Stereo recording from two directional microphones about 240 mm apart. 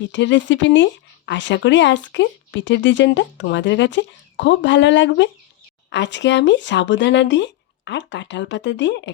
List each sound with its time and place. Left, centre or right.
0.1 s speech: left